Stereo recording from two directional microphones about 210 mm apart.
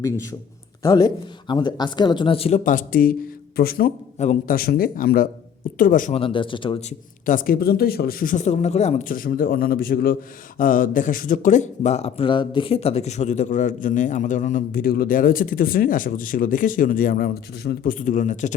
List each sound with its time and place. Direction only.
0.0 s a man's voice: 15° left (ahead or behind); by 6.1 s 40° left (ahead or behind)
6.1 s speech: 25° left (ahead or behind)
7.3 s speech: 40° left (ahead or behind)